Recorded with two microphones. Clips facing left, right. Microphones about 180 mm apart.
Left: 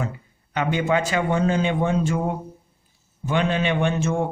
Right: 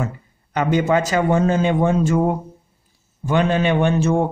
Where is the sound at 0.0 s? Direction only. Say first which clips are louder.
Right 3 dB; 40° right (ahead or behind).